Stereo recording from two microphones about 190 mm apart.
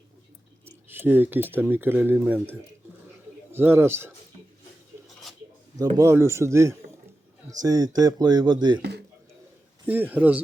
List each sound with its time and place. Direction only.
0.6 s speech: 10° right (ahead or behind)
6.0 s speech: 15° right (ahead or behind)
8.8 s a sound: 60° right (ahead or behind)
9.8 s speech: 10° right (ahead or behind)